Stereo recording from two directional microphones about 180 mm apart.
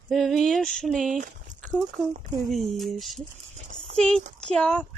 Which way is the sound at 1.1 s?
45° right (ahead or behind).